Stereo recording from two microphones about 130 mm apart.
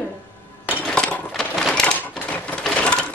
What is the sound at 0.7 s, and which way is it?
Chink, 10° left (ahead or behind).